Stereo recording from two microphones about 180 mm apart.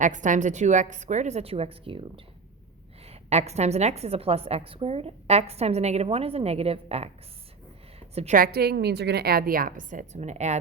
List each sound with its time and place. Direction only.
0.0 s a woman's voice: 45° right (ahead or behind)
7.9 s a sound: 35° right (ahead or behind)
8.4 s a woman's voice: 60° right (ahead or behind); by 10.6 s 40° right (ahead or behind)